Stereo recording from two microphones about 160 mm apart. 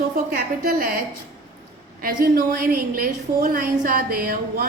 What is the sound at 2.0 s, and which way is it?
A woman's voice, 60° right (ahead or behind).